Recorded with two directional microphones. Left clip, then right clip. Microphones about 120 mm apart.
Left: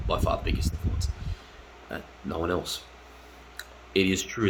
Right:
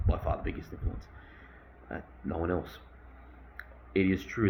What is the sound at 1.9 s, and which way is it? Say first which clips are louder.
Speech: left 3 dB; 30° left (ahead or behind).